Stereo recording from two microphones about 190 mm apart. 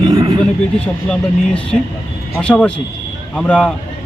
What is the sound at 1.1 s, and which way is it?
Speech, 5° left (ahead or behind).